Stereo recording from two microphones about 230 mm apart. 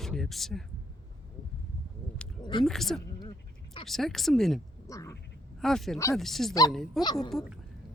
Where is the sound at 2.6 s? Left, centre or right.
Centre.